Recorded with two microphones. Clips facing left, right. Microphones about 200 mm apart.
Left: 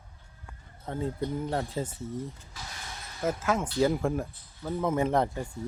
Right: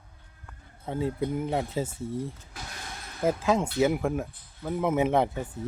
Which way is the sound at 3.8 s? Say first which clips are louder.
Right 1 dB; 5° right (ahead or behind).